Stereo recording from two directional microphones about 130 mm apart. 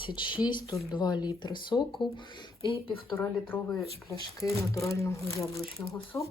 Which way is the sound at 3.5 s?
30° left (ahead or behind).